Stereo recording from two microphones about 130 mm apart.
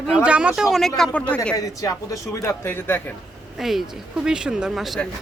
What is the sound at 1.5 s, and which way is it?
Speech, 25° left (ahead or behind).